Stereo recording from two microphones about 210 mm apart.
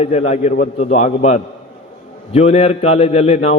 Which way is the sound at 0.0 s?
30° left (ahead or behind).